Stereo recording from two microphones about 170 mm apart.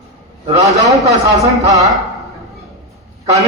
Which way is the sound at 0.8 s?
20° right (ahead or behind).